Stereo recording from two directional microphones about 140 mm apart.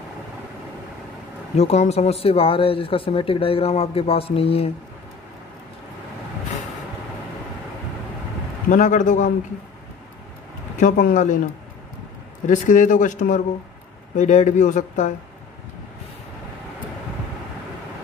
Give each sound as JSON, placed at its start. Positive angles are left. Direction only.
{"t": 1.6, "sound": "speech", "side_deg": 50}
{"t": 8.6, "sound": "speech", "side_deg": 65}
{"t": 10.8, "sound": "speech", "side_deg": 65}
{"t": 12.4, "sound": "speech", "side_deg": 65}